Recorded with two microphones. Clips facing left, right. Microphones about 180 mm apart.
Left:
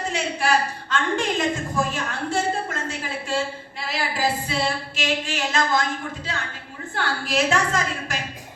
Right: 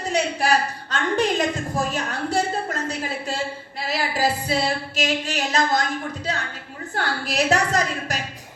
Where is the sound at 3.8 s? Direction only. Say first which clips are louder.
Right 2 dB; 40° right (ahead or behind).